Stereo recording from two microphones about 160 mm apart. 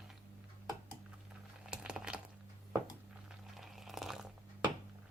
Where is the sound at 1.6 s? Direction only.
5° right (ahead or behind).